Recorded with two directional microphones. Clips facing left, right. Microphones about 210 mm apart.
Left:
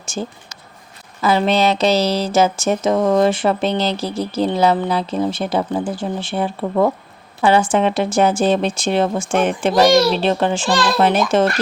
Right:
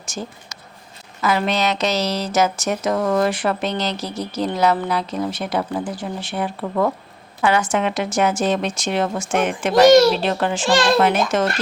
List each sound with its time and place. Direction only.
1.2 s a woman's voice: 30° left (ahead or behind)